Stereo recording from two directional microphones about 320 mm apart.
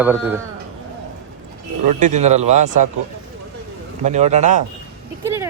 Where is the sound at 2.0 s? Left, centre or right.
Right.